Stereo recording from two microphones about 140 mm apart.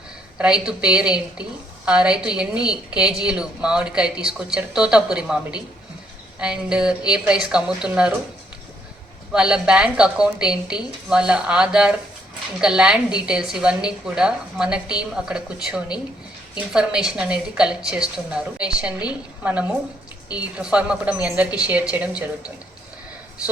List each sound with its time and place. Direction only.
0.3 s a woman's voice: 5° right (ahead or behind)
9.3 s a woman's voice: 5° right (ahead or behind)